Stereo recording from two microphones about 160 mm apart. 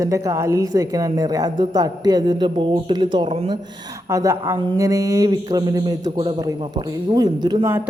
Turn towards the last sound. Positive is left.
turn(degrees=-25)  # may be behind; listen again after turning